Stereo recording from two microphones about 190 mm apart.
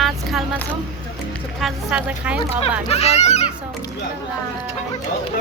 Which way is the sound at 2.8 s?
35° left (ahead or behind).